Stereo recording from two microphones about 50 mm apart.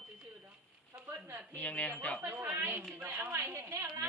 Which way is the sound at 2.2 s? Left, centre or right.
Right.